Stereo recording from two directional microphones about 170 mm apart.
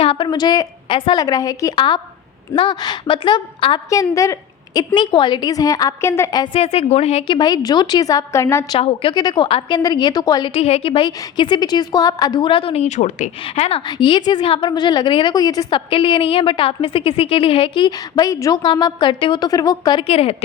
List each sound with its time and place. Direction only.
0.0 s a woman's voice: 30° left (ahead or behind)
7.3 s a woman's voice: 25° left (ahead or behind)
8.8 s a woman's voice: 35° left (ahead or behind)
10.5 s a woman's voice: 35° left (ahead or behind)
13.4 s a woman's voice: 35° left (ahead or behind)